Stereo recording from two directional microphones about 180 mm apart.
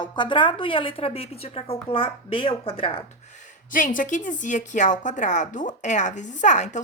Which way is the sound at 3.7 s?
50° left (ahead or behind).